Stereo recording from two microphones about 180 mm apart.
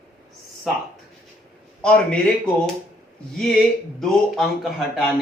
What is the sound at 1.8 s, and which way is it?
Speech, 5° left (ahead or behind).